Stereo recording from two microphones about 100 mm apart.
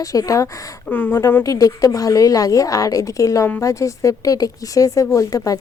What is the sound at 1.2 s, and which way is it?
Speech, 30° left (ahead or behind).